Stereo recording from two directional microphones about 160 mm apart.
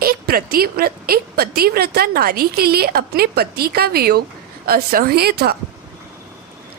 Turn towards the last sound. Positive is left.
turn(degrees=-75)  # may be behind; listen again after turning